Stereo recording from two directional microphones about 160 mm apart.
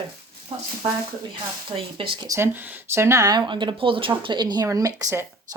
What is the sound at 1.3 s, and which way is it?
Speech, 35° right (ahead or behind).